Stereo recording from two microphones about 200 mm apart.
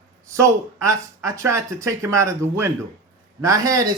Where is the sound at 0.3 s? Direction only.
15° right (ahead or behind).